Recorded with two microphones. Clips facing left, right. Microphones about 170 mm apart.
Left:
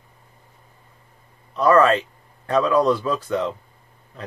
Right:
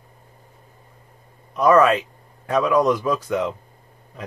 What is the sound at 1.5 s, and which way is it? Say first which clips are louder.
Speech: even; 15° right (ahead or behind).